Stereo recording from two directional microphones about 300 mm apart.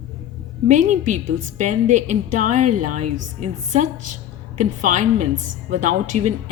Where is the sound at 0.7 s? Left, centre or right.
Right.